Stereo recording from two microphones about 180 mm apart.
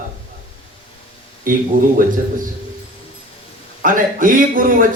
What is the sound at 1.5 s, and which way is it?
Speech, 50° right (ahead or behind).